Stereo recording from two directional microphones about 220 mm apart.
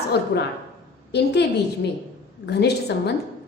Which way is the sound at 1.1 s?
50° left (ahead or behind).